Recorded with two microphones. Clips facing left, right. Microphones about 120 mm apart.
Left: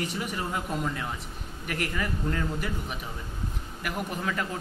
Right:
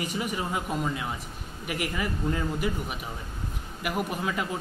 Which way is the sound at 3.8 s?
10° right (ahead or behind).